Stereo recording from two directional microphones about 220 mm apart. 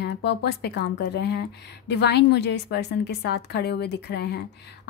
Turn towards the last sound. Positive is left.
turn(degrees=50)  # may be behind; listen again after turning